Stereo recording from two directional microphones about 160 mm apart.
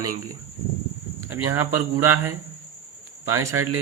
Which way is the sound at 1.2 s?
15° right (ahead or behind).